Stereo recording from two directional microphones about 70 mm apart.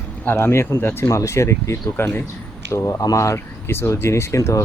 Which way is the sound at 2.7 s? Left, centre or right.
Left.